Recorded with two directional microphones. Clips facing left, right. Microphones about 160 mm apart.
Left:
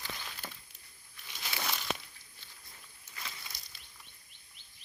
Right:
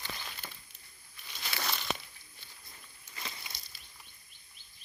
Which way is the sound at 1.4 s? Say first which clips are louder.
Right 1 dB; 5° left (ahead or behind).